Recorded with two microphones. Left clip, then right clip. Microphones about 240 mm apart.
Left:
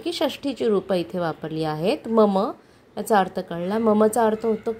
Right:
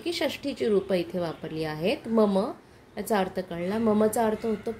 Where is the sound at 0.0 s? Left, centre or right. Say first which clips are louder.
Left 4 dB; left.